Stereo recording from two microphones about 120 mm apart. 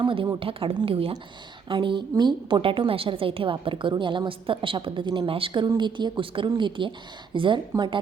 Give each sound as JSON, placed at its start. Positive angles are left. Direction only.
{"t": 0.0, "sound": "a woman's voice", "side_deg": -45}